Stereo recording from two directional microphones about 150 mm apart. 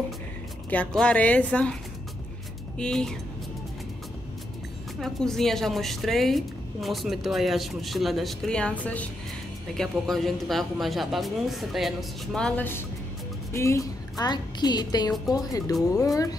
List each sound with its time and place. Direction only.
0.7 s a woman's voice: 10° left (ahead or behind)
2.8 s a woman's voice: 5° left (ahead or behind)
5.0 s a woman's voice: centre (ahead or behind); by 16.3 s 25° left (ahead or behind)